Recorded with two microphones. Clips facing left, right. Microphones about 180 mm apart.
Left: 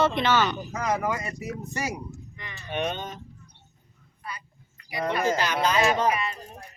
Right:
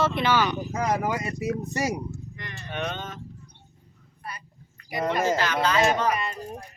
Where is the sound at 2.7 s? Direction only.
15° left (ahead or behind).